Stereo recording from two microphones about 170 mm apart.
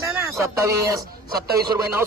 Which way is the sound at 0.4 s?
15° right (ahead or behind).